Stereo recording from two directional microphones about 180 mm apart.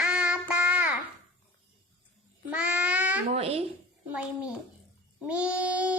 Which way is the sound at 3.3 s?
35° right (ahead or behind).